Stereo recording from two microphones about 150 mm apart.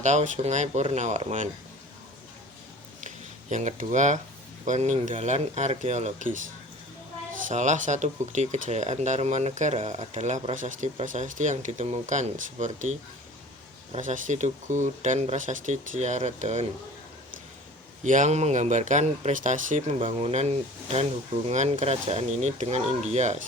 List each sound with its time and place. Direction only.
0.0 s speech: 50° right (ahead or behind)
3.5 s speech: 55° right (ahead or behind)
7.4 s speech: 55° right (ahead or behind)
18.0 s speech: 55° right (ahead or behind)
20.0 s speech: 40° right (ahead or behind)